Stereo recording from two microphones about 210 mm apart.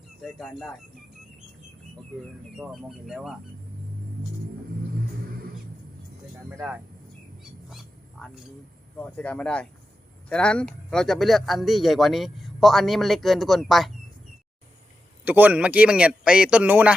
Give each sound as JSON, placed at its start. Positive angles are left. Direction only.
{"t": 0.2, "sound": "a man's voice", "side_deg": 5}
{"t": 2.6, "sound": "a man's voice", "side_deg": -5}
{"t": 6.6, "sound": "a man's voice", "side_deg": -5}
{"t": 7.7, "sound": "wild animals", "side_deg": 0}
{"t": 9.1, "sound": "a man's voice", "side_deg": 5}
{"t": 15.2, "sound": "a man's voice", "side_deg": -10}